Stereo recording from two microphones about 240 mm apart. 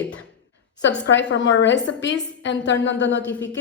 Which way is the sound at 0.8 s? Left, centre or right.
Left.